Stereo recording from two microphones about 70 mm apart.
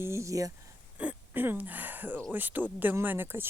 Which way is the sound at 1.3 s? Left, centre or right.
Right.